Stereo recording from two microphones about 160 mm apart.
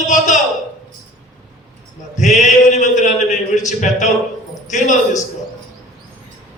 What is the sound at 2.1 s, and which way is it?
A man's voice, 50° left (ahead or behind).